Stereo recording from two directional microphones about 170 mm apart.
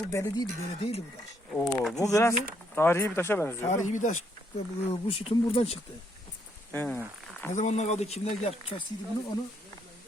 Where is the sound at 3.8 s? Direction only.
45° left (ahead or behind).